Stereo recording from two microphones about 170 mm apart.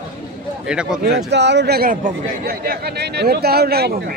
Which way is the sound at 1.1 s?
90° right.